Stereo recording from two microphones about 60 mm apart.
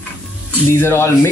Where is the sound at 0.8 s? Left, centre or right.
Left.